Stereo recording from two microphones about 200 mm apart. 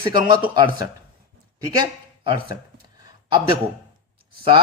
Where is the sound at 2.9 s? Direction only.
25° right (ahead or behind).